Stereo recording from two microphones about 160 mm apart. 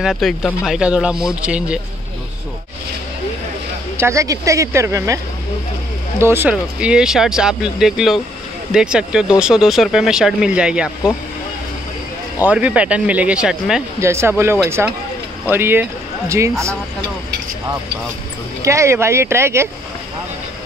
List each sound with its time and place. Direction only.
0.0 s speech: centre (ahead or behind)
3.9 s speech: 20° right (ahead or behind)
12.4 s speech: 10° right (ahead or behind)
13.9 s speech: 15° right (ahead or behind)
18.6 s speech: 20° right (ahead or behind)